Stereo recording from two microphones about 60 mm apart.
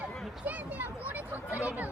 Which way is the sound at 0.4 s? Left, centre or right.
Right.